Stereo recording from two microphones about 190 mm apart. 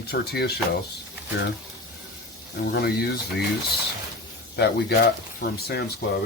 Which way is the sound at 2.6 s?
55° left (ahead or behind).